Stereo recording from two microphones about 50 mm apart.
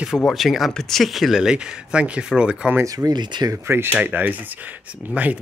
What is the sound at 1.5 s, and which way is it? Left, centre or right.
Speech, centre.